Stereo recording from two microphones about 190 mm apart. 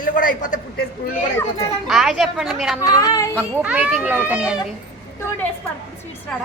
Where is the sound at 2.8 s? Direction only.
20° left (ahead or behind).